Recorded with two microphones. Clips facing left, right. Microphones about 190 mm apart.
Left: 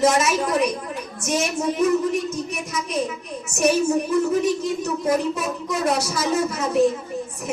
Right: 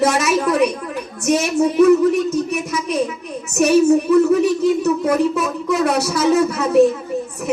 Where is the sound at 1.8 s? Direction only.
65° right (ahead or behind).